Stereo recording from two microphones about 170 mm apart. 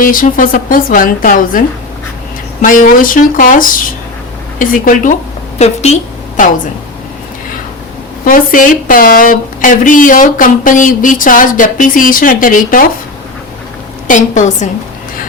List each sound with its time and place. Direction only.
0.0 s speech: 55° left (ahead or behind)
5.5 s a woman's voice: 40° left (ahead or behind)
8.2 s speech: 50° left (ahead or behind)
14.1 s speech: 45° left (ahead or behind)